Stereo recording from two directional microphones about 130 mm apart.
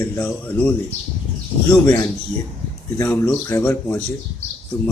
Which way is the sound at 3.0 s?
20° left (ahead or behind).